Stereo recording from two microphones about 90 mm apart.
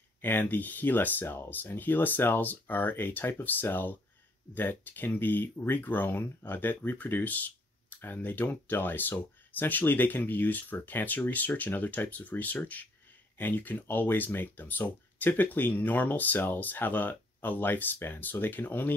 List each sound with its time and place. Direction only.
0.2 s speech: 20° left (ahead or behind)